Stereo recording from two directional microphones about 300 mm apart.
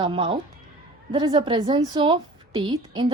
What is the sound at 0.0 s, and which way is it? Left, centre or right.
Speech, centre.